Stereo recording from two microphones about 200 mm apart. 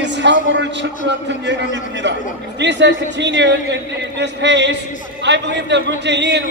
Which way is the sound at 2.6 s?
60° right (ahead or behind).